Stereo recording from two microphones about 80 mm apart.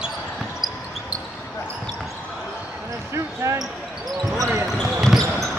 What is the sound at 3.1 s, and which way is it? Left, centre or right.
Basketball bounce, right.